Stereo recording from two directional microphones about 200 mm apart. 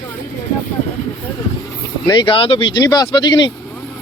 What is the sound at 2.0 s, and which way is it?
Speech, 25° left (ahead or behind).